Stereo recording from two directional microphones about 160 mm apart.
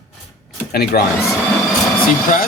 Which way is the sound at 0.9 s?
75° left (ahead or behind).